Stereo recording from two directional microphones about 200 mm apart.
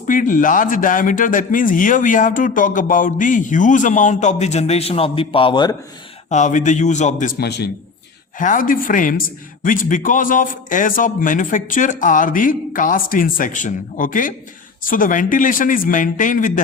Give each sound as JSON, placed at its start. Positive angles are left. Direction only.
{"t": 0.1, "sound": "a woman's voice", "side_deg": 40}
{"t": 6.3, "sound": "a woman's voice", "side_deg": 40}
{"t": 8.4, "sound": "a woman's voice", "side_deg": 40}